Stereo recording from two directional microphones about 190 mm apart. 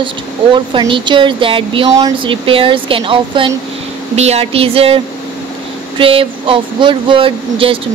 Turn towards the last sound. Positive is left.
turn(degrees=-30)  # may be behind; listen again after turning